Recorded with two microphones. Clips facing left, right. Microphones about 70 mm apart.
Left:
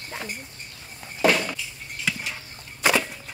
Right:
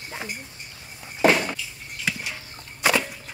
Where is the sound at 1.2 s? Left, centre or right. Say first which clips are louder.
Right 2 dB; right.